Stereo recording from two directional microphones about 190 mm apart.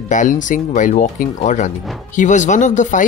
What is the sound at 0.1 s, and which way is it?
Speech, 40° left (ahead or behind).